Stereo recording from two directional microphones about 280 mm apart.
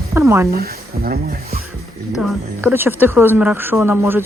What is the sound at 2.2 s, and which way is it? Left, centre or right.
Speech, centre.